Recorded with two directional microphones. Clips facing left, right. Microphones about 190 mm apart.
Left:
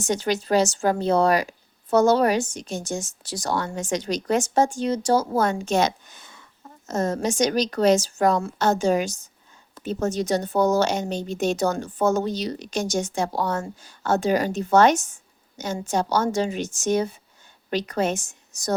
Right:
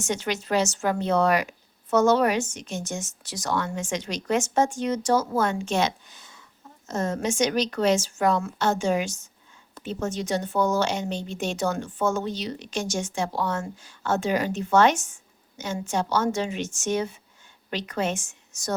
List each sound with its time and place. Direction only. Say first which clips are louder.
0.0 s speech: left 4 dB; 35° left (ahead or behind); by 6.4 s 55° left (ahead or behind)
6.8 s a woman's voice: left 3 dB; 40° left (ahead or behind)